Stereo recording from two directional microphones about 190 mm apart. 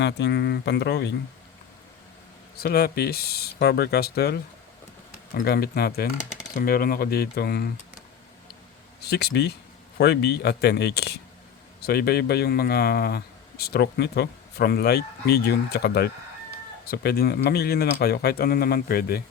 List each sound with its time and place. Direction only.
0.0 s speech: 60° left (ahead or behind)
2.6 s speech: 55° left (ahead or behind)
9.0 s speech: 55° left (ahead or behind)